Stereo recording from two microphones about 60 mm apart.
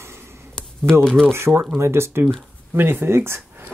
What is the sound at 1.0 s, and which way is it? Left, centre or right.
Speech, centre.